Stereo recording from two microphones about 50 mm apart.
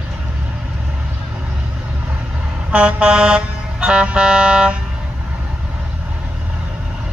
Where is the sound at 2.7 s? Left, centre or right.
Right.